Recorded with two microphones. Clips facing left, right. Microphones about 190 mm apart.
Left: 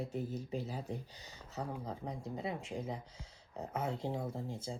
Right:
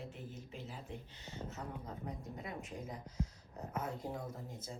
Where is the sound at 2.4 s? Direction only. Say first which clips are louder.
Left 5 dB; 90° left.